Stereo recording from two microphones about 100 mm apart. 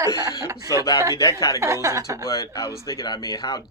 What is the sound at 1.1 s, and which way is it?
Speech, 35° left (ahead or behind).